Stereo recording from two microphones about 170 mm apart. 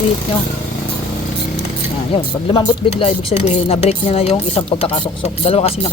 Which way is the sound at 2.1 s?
30° left (ahead or behind).